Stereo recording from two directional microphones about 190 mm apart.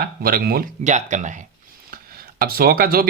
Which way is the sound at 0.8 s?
40° right (ahead or behind).